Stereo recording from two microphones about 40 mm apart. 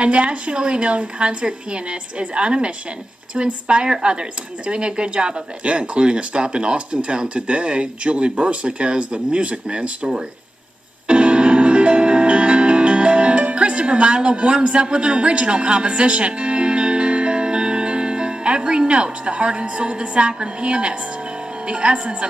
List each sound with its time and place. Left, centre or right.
0.0 s speech: right
11.1 s music: right
14.9 s speech: right